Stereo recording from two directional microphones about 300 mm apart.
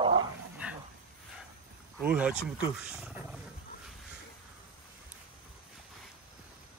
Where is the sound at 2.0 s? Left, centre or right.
Centre.